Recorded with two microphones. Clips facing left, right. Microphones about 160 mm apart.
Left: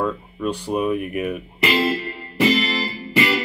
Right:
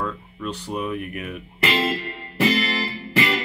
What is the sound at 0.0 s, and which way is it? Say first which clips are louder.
Speech: left 6 dB; 10° left (ahead or behind).